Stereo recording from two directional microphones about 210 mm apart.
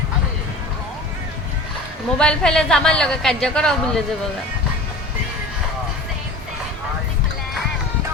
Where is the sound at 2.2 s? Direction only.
5° left (ahead or behind).